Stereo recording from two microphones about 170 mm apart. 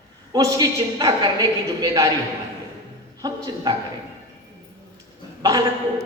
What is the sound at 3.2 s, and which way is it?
Speech, 20° right (ahead or behind).